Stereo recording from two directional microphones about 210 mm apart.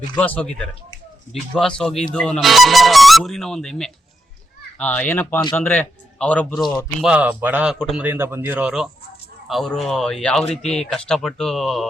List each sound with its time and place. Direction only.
0.2 s a man's voice: 5° left (ahead or behind)